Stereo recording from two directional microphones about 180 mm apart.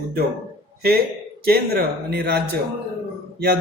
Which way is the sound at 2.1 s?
60° right (ahead or behind).